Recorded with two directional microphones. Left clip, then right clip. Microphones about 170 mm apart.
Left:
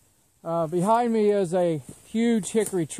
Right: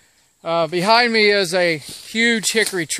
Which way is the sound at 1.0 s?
5° right (ahead or behind).